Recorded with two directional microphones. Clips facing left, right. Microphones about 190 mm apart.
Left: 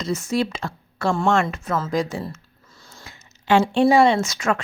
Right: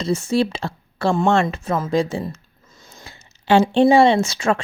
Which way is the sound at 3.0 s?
30° right (ahead or behind).